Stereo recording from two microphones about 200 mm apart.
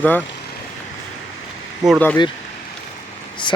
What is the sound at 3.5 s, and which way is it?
Speech, 25° left (ahead or behind).